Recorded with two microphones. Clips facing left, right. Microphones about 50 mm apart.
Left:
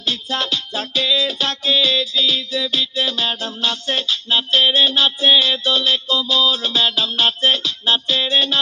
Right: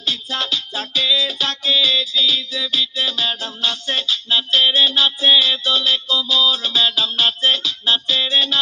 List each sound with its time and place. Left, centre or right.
0.0 s music: left